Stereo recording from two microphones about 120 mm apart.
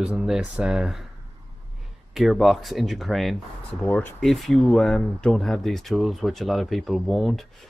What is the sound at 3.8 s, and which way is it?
Speech, 15° left (ahead or behind).